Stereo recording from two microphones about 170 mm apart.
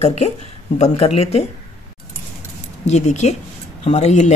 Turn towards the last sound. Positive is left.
turn(degrees=40)  # may be behind; listen again after turning